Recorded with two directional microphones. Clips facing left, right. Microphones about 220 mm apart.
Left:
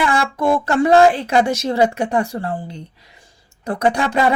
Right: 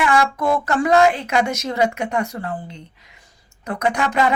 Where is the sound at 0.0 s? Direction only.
30° left (ahead or behind).